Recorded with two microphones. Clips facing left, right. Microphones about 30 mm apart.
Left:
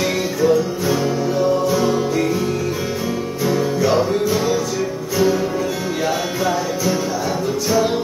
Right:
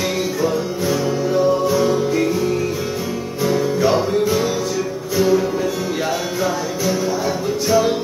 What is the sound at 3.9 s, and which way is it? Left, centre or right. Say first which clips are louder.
Music: even; centre.